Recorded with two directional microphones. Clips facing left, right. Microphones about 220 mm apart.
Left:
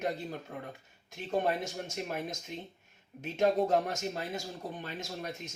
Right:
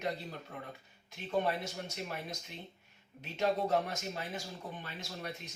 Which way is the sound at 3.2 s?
50° left (ahead or behind).